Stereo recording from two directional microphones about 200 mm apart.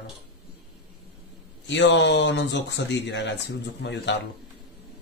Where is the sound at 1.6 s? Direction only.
65° left (ahead or behind).